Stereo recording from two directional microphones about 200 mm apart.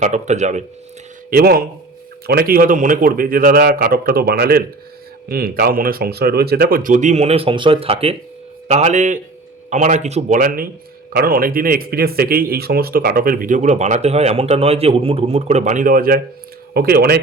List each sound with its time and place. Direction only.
0.0 s speech: 35° right (ahead or behind)
1.3 s speech: 50° right (ahead or behind)